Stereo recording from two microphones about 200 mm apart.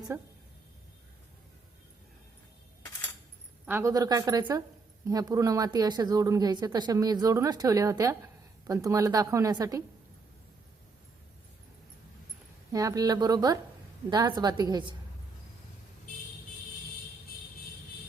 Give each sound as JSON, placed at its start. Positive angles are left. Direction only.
{"t": 0.1, "sound": "speech", "side_deg": -15}
{"t": 3.7, "sound": "speech", "side_deg": -15}
{"t": 12.7, "sound": "a woman's voice", "side_deg": -15}